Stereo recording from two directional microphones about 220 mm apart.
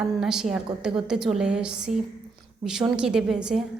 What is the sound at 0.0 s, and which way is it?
A woman's voice, centre (ahead or behind).